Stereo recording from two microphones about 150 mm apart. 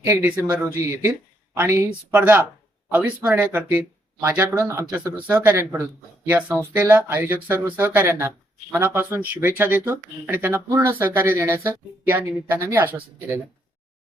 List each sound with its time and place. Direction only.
0.0 s speech: 15° right (ahead or behind)